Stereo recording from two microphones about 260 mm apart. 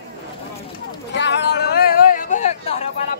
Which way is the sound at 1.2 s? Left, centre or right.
Left.